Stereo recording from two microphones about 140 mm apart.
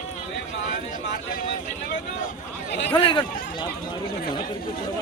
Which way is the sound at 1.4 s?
65° left (ahead or behind).